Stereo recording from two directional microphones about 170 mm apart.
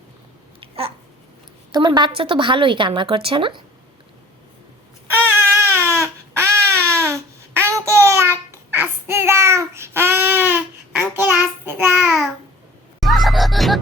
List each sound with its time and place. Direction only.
0.6 s babbling: 35° right (ahead or behind)
1.7 s a woman's voice: 25° right (ahead or behind)
5.3 s baby cry: 15° right (ahead or behind)
11.1 s child singing: 15° right (ahead or behind)
13.0 s music: centre (ahead or behind)